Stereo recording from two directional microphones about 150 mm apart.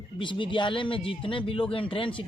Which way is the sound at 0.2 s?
35° left (ahead or behind).